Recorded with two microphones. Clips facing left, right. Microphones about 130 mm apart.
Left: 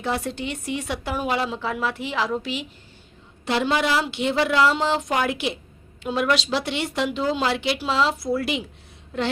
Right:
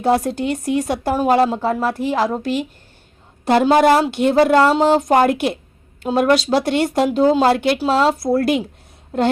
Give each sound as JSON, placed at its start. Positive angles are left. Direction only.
{"t": 0.0, "sound": "a woman's voice", "side_deg": -40}